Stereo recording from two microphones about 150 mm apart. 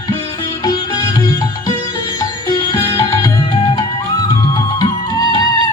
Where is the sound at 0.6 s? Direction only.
25° left (ahead or behind).